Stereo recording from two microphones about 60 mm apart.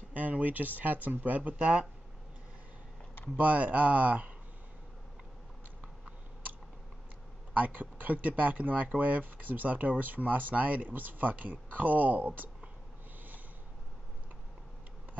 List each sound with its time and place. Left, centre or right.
0.1 s speech: right
3.3 s speech: right
7.5 s speech: right